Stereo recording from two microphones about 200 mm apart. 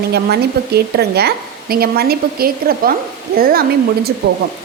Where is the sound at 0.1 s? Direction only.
55° right (ahead or behind).